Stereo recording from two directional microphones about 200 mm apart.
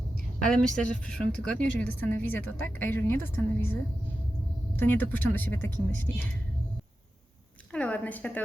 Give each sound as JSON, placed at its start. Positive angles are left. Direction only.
{"t": 0.4, "sound": "a woman's voice", "side_deg": 5}
{"t": 1.6, "sound": "a woman's voice", "side_deg": 70}
{"t": 1.9, "sound": "a woman's voice", "side_deg": 10}
{"t": 4.8, "sound": "a woman's voice", "side_deg": 10}
{"t": 7.7, "sound": "a sound", "side_deg": 5}